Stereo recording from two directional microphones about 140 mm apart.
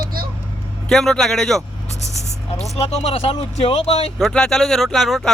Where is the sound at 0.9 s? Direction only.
5° left (ahead or behind).